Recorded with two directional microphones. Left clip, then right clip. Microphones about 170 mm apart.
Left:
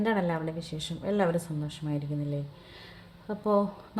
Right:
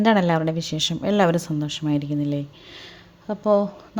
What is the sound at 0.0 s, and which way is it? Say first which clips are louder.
Speech: right 10 dB; 55° right (ahead or behind).